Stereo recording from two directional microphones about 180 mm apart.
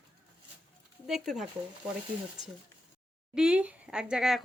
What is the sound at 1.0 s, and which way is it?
Speech, centre (ahead or behind).